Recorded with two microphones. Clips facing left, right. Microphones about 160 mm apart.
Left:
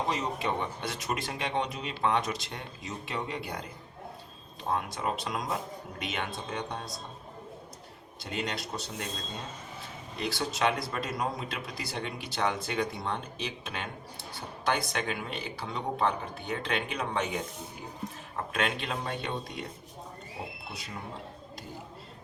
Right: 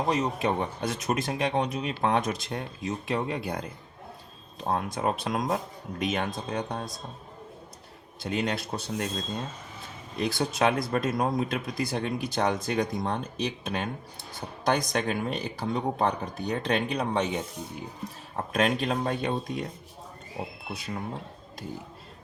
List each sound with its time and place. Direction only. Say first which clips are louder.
0.1 s speech: right 5 dB; 45° right (ahead or behind)
4.7 s speech: right 4 dB; 45° right (ahead or behind)
8.2 s speech: right 6 dB; 50° right (ahead or behind)
10.2 s speech: right 4 dB; 45° right (ahead or behind)
18.5 s speech: right 7 dB; 40° right (ahead or behind)